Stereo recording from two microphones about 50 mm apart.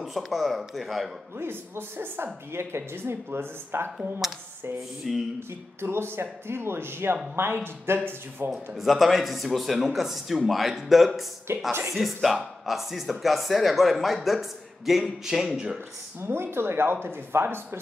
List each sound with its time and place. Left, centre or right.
0.0 s speech: centre
1.4 s speech: right
5.1 s speech: centre
5.8 s speech: right
8.5 s speech: centre
11.5 s speech: right
11.9 s speech: centre
16.2 s speech: right